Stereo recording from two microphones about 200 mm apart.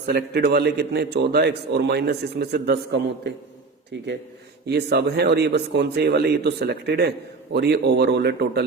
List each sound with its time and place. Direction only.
0.0 s a man's voice: 50° right (ahead or behind)
4.6 s a man's voice: 55° right (ahead or behind)